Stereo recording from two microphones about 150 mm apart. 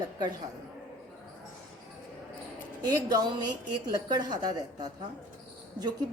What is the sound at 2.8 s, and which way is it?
A woman's voice, 25° right (ahead or behind).